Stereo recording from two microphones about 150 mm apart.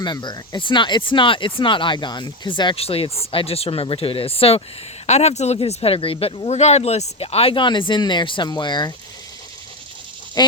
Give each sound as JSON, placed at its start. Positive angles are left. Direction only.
{"t": 0.0, "sound": "speech", "side_deg": 30}
{"t": 10.4, "sound": "speech", "side_deg": 30}